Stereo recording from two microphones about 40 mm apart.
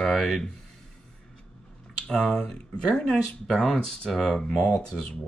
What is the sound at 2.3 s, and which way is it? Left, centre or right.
Speech, centre.